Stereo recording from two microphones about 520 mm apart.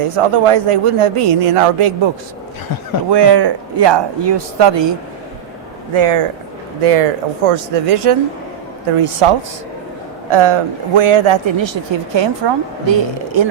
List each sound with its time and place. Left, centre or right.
0.0 s a man's voice: right
3.1 s speech: right
5.9 s a man's voice: right
6.8 s speech: right
10.2 s a woman's voice: right